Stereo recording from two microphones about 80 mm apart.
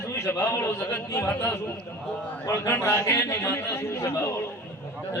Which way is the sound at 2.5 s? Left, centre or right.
Left.